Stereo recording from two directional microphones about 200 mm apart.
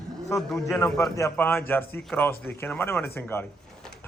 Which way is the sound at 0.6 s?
15° left (ahead or behind).